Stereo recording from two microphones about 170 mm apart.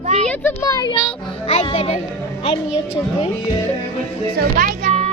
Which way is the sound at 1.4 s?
35° left (ahead or behind).